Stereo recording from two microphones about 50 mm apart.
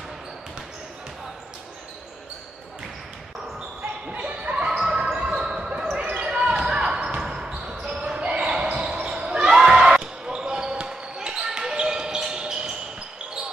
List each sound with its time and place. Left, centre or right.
4.1 s basketball bounce: right